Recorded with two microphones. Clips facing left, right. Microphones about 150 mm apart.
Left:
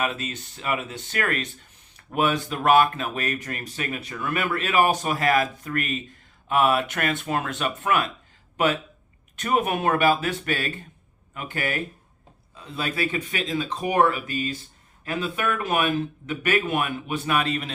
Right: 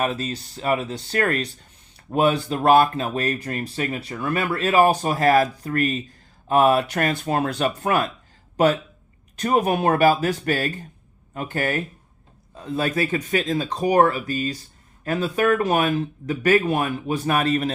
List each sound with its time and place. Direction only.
0.0 s speech: 35° right (ahead or behind)
9.3 s speech: 35° right (ahead or behind)